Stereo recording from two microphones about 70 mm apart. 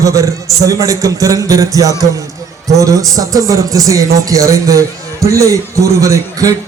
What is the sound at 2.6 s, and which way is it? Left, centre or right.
Music, right.